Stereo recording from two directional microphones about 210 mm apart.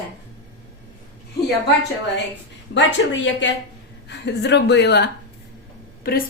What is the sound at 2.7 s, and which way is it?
Speech, 60° left (ahead or behind).